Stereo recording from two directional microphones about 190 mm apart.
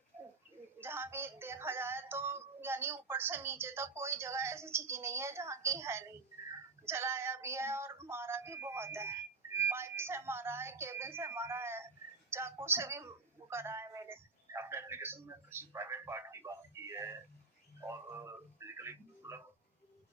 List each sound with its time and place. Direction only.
0.8 s a man's voice: 10° right (ahead or behind)